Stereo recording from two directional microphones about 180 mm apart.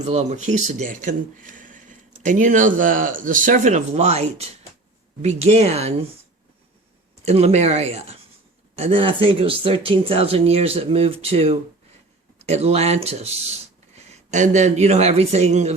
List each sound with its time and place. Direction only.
0.0 s speech: 40° right (ahead or behind)
7.3 s speech: 35° right (ahead or behind)